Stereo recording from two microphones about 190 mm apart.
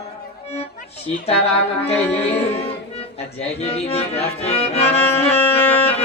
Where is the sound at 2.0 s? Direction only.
10° left (ahead or behind).